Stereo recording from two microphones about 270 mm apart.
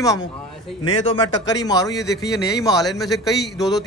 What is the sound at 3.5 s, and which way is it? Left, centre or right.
Speech, centre.